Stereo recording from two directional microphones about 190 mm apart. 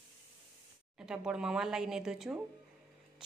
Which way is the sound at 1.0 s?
5° right (ahead or behind).